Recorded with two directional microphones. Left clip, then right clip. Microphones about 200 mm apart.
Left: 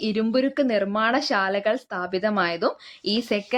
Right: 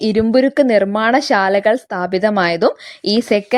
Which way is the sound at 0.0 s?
30° right (ahead or behind).